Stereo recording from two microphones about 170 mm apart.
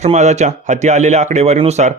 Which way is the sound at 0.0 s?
40° right (ahead or behind).